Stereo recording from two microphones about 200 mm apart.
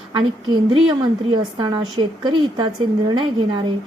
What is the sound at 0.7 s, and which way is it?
A woman's voice, 25° right (ahead or behind).